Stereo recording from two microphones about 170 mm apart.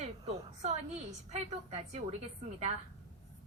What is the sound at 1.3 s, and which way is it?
Speech, 40° right (ahead or behind).